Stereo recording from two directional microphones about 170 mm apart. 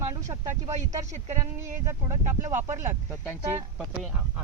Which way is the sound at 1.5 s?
15° right (ahead or behind).